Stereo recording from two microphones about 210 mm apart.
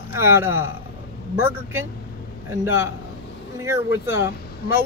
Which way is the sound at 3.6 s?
10° right (ahead or behind).